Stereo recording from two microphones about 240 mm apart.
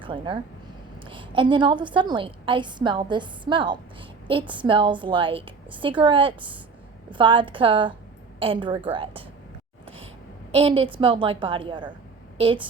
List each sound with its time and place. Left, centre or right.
0.0 s a woman's voice: right
9.8 s a sound: right
10.5 s a woman's voice: right